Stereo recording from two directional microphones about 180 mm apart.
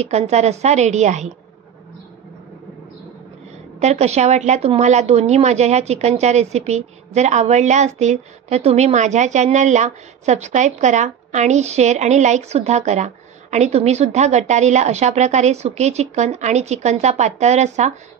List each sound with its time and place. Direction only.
0.0 s a woman's voice: 35° right (ahead or behind)
3.8 s a woman's voice: 35° right (ahead or behind)